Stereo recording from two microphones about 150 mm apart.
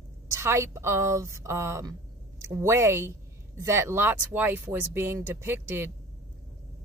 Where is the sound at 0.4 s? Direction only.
20° right (ahead or behind).